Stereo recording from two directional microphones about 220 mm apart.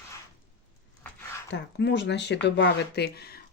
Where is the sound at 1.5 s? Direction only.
50° left (ahead or behind).